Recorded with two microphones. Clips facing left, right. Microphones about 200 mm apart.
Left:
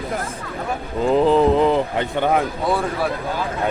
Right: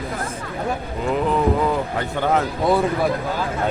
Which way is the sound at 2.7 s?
15° right (ahead or behind).